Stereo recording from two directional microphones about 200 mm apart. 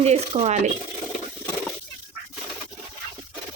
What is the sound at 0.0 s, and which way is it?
Speech, 35° right (ahead or behind).